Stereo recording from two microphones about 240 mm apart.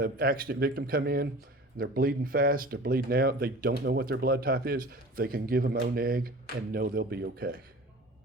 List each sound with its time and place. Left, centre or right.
0.0 s speech: right